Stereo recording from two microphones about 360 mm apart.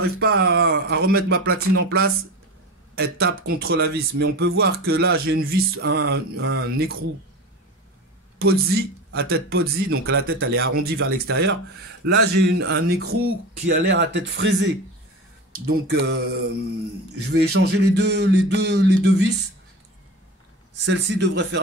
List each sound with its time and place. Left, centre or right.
0.2 s speech: right
8.4 s speech: right
12.5 s speech: right
20.7 s speech: right